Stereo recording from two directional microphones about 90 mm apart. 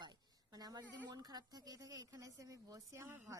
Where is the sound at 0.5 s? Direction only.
45° right (ahead or behind).